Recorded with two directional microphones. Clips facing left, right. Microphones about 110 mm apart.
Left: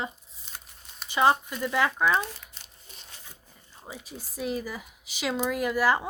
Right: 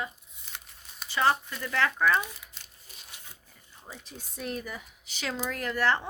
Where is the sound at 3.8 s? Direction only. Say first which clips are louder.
Left 4 dB; 10° left (ahead or behind).